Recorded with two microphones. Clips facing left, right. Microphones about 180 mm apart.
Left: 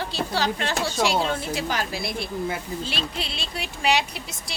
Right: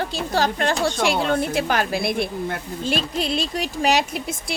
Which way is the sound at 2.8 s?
45° right (ahead or behind).